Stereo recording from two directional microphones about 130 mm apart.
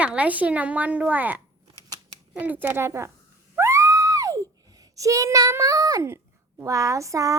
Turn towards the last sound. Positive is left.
turn(degrees=-25)  # may be behind; listen again after turning